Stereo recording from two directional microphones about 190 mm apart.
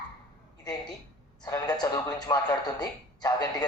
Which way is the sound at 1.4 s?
20° left (ahead or behind).